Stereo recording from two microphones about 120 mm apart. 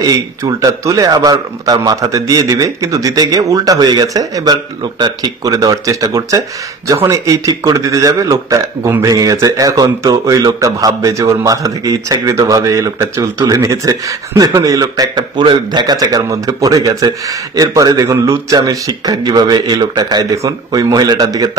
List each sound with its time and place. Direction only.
0.0 s a man's voice: 30° right (ahead or behind)